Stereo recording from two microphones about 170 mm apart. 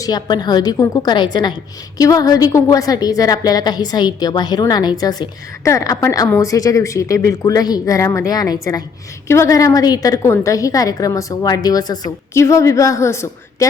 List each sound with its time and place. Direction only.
0.0 s a woman's voice: 25° left (ahead or behind)